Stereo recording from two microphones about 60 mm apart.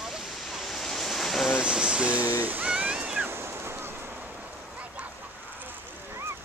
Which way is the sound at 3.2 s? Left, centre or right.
Right.